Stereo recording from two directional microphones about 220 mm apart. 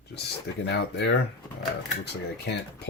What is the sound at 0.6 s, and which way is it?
Speech, 50° left (ahead or behind).